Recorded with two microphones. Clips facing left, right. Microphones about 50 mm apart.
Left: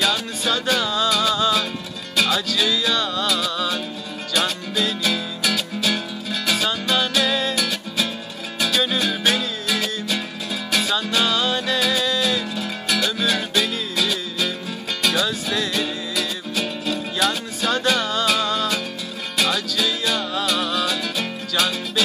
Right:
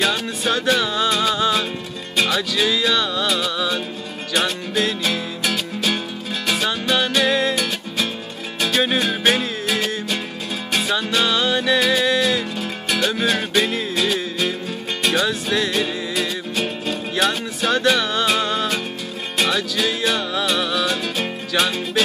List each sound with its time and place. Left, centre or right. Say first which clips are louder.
0.0 s music: right 1 dB; right
0.7 s music: right 1 dB; right
2.5 s music: right 2 dB; right
5.0 s music: even; right
10.9 s music: right 3 dB; right
15.2 s music: right 3 dB; right
15.7 s music: right 2 dB; right